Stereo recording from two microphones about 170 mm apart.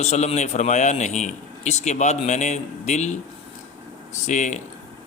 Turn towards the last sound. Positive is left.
turn(degrees=45)  # may be behind; listen again after turning